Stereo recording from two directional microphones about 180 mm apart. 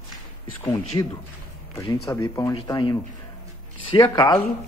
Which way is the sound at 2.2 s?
20° left (ahead or behind).